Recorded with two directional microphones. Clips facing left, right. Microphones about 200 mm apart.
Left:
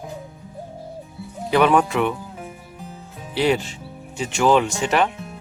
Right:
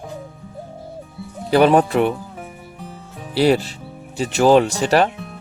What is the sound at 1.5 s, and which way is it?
Speech, 35° right (ahead or behind).